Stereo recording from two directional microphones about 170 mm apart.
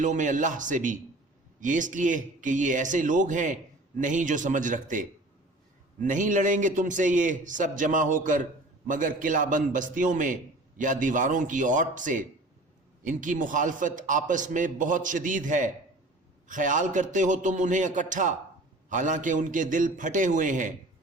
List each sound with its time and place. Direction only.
0.0 s speech: 50° right (ahead or behind)